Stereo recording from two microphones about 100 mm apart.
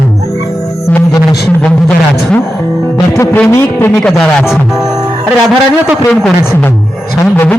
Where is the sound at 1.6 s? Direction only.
10° left (ahead or behind).